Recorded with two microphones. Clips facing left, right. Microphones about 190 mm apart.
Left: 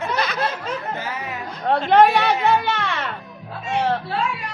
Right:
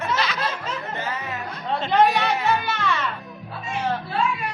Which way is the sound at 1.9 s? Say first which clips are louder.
Left 4 dB; 65° left (ahead or behind).